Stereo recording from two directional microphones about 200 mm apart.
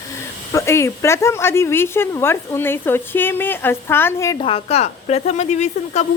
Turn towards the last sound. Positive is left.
turn(degrees=35)  # may be behind; listen again after turning